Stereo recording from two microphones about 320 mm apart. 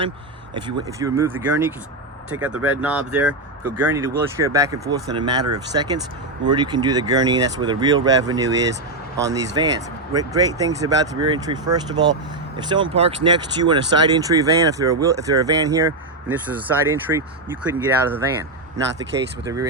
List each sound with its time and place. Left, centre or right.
0.5 s speech: centre
2.3 s speech: right
2.6 s speech: centre
19.5 s speech: centre